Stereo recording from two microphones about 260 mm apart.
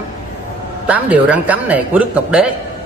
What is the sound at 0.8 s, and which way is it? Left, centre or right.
A man's voice, centre.